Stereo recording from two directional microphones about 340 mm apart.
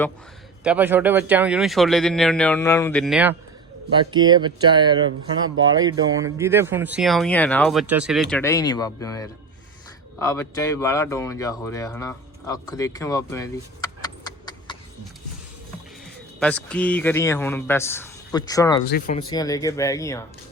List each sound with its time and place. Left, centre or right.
0.6 s speech: centre
4.3 s speech: centre
16.4 s speech: centre
18.9 s speech: left
19.3 s speech: centre